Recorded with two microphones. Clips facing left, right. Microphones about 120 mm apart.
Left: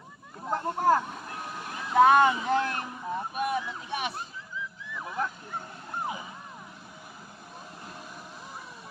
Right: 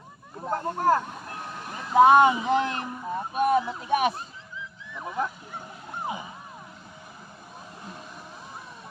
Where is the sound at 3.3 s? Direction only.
45° right (ahead or behind).